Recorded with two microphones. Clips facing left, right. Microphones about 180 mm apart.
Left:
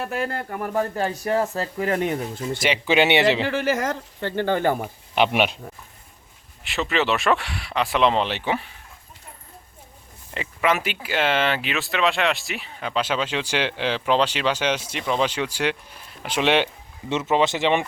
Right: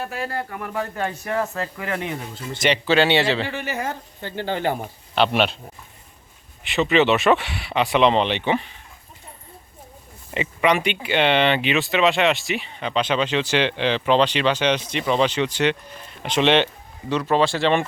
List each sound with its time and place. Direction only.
0.1 s speech: 60° left (ahead or behind)
0.5 s speech: 40° left (ahead or behind)
2.6 s speech: 10° left (ahead or behind)
3.5 s speech: 90° left; by 4.8 s 50° left (ahead or behind)
5.1 s speech: 15° left (ahead or behind)
6.7 s speech: centre (ahead or behind)
10.3 s speech: centre (ahead or behind)
17.1 s speech: 20° left (ahead or behind)